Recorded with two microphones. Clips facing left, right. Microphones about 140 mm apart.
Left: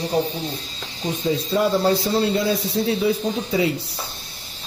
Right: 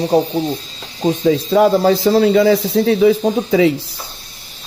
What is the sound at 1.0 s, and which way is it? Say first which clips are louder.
Speech: right 9 dB; 65° right (ahead or behind).